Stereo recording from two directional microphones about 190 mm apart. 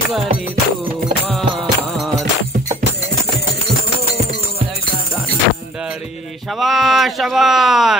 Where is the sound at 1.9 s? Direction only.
Centre (ahead or behind).